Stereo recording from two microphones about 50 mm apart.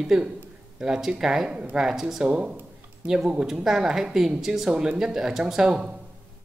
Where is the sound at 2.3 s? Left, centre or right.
Right.